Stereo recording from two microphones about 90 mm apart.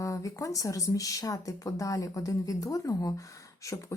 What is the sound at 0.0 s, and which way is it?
Speech, 35° left (ahead or behind).